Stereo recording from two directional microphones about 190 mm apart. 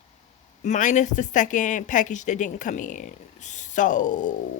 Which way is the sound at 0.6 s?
40° left (ahead or behind).